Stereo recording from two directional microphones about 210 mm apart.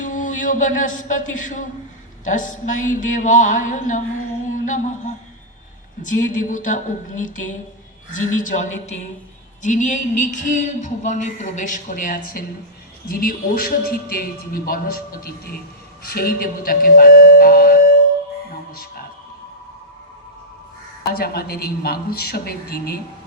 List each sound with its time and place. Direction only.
0.0 s a sound: 35° left (ahead or behind)
2.3 s speech: 35° left (ahead or behind)
4.4 s music: 35° left (ahead or behind)
6.0 s a man's voice: 40° left (ahead or behind)
21.1 s a man's voice: 45° left (ahead or behind)